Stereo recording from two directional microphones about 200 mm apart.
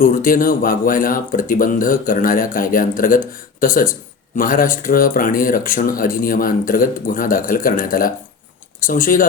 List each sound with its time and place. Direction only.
0.0 s speech: 45° left (ahead or behind)